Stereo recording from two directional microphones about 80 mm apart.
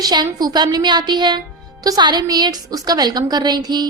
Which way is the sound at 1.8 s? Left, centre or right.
Right.